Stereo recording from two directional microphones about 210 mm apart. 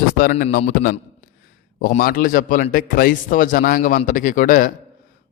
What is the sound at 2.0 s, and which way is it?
A man's voice, 40° left (ahead or behind).